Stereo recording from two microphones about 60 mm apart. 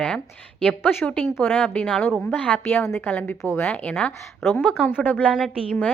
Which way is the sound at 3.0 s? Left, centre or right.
Left.